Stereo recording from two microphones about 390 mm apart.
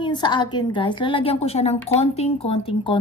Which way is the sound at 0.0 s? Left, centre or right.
Centre.